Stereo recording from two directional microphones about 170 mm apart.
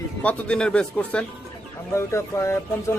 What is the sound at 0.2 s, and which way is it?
Speech, 10° left (ahead or behind).